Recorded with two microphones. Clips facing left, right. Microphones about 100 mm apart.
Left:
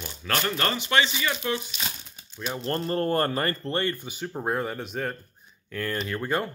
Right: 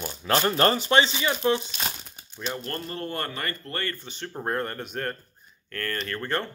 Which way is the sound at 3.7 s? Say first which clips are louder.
Left 5 dB; 15° left (ahead or behind).